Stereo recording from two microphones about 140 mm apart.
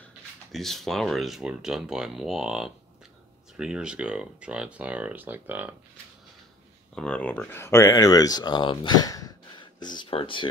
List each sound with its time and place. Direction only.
0.5 s speech: centre (ahead or behind)
7.0 s speech: 10° left (ahead or behind); by 10.5 s 40° left (ahead or behind)